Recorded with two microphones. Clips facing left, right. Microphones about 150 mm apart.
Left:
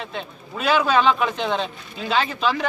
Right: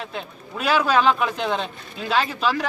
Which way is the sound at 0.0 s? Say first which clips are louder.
Left 1 dB; centre (ahead or behind).